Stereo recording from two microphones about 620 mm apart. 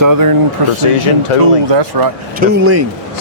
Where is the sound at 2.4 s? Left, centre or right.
Right.